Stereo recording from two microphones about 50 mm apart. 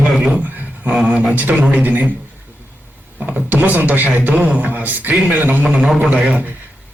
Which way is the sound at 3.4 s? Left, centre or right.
Right.